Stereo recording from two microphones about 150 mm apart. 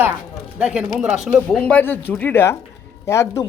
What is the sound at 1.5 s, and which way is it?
Speech, 10° left (ahead or behind).